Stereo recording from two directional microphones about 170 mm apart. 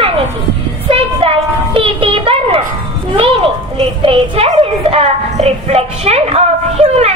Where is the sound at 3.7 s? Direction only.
30° right (ahead or behind).